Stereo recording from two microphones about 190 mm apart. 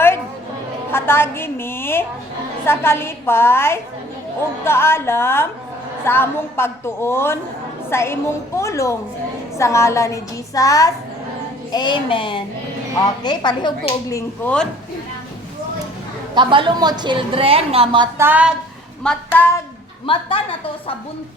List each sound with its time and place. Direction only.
0.9 s a woman's voice: 10° left (ahead or behind)
16.3 s a woman's voice: 25° right (ahead or behind)
18.2 s a woman's voice: 10° right (ahead or behind)
19.0 s a woman's voice: 10° left (ahead or behind)
20.1 s speech: 25° left (ahead or behind)